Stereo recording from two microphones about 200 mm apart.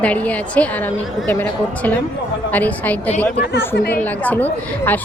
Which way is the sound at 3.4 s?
55° left (ahead or behind).